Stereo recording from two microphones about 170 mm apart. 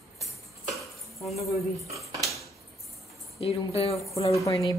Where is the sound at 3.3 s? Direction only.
35° left (ahead or behind).